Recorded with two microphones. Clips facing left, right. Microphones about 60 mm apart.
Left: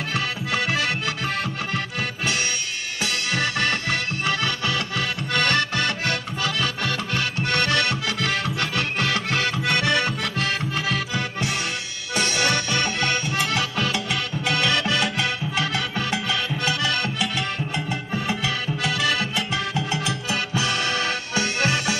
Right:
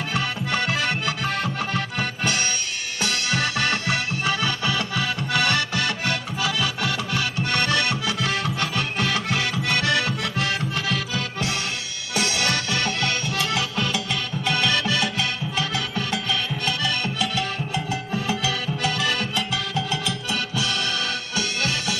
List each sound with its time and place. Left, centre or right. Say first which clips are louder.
0.5 s music: left 1 dB; centre
4.9 s accordion: right 1 dB; centre
5.9 s music: even; centre
10.9 s music: left 1 dB; left
12.8 s music: left 1 dB; centre
13.4 s music: left 1 dB; centre
19.7 s music: left 1 dB; centre